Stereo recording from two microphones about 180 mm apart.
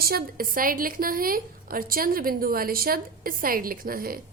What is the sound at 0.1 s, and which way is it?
A woman's voice, 55° right (ahead or behind).